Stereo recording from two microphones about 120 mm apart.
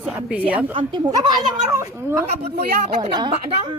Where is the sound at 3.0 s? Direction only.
40° right (ahead or behind).